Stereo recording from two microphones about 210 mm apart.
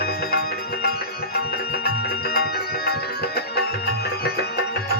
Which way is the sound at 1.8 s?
50° left (ahead or behind).